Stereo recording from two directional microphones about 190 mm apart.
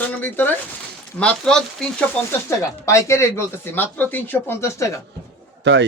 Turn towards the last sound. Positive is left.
turn(degrees=-65)  # may be behind; listen again after turning